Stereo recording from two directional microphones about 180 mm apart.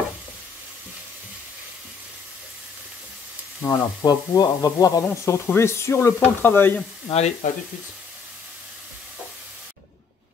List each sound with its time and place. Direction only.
3.6 s speech: 20° left (ahead or behind)
7.1 s speech: 35° left (ahead or behind)